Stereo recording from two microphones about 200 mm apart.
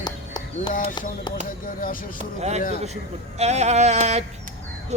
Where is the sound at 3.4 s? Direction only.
35° right (ahead or behind).